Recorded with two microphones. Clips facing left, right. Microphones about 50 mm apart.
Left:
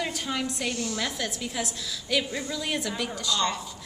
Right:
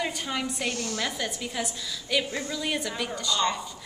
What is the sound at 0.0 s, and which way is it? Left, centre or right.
A woman's voice, centre.